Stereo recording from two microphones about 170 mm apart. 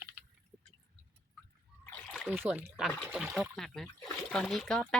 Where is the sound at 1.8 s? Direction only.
5° left (ahead or behind).